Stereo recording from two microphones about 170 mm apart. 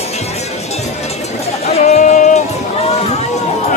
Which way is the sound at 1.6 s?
40° left (ahead or behind).